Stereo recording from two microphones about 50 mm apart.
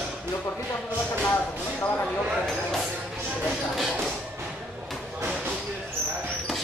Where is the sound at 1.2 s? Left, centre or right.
Left.